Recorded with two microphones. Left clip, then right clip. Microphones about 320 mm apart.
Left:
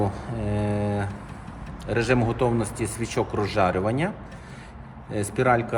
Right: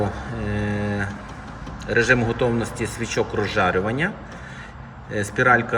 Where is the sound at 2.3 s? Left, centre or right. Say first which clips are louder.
Right 2 dB; centre.